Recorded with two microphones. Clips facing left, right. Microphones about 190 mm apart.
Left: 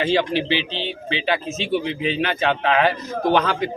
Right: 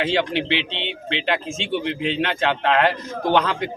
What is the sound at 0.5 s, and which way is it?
Speech, 80° right.